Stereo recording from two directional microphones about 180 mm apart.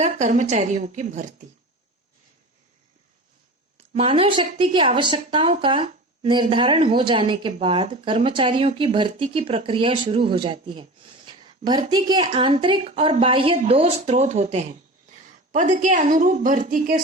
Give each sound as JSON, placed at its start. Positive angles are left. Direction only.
{"t": 0.0, "sound": "speech", "side_deg": -40}
{"t": 3.8, "sound": "speech", "side_deg": -35}